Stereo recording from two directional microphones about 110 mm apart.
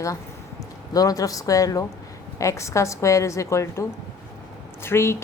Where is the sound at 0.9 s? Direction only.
35° left (ahead or behind).